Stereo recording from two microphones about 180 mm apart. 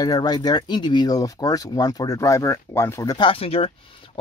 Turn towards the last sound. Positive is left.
turn(degrees=30)  # may be behind; listen again after turning